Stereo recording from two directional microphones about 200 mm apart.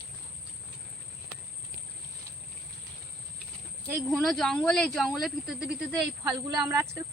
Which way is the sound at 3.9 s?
Centre (ahead or behind).